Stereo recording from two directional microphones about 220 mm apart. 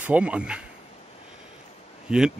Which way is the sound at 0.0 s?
5° right (ahead or behind).